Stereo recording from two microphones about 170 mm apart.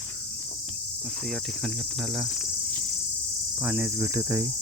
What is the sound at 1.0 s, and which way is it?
Speech, centre (ahead or behind).